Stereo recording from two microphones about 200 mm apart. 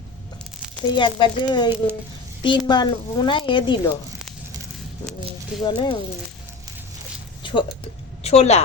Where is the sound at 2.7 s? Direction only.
20° left (ahead or behind).